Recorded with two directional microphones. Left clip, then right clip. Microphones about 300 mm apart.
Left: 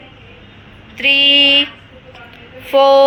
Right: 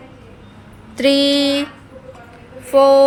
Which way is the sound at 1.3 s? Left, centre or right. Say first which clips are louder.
Left 7 dB; centre.